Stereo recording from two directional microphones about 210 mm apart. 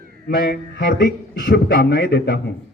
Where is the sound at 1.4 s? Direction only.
45° left (ahead or behind).